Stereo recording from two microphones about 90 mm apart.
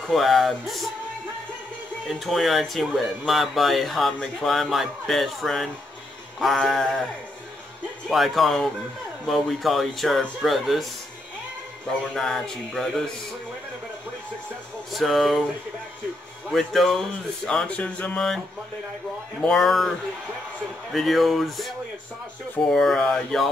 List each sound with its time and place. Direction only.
0.0 s speech: centre (ahead or behind)
2.0 s speech: centre (ahead or behind)
8.1 s speech: centre (ahead or behind)
12.1 s speech: 5° left (ahead or behind)
14.9 s speech: centre (ahead or behind)
16.5 s speech: 5° left (ahead or behind)
19.4 s speech: 5° left (ahead or behind)